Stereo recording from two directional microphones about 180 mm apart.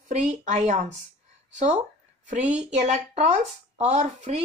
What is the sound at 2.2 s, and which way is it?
A woman's voice, 40° right (ahead or behind).